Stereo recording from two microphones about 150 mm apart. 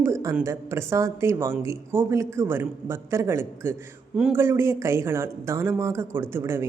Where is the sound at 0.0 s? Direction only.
20° right (ahead or behind).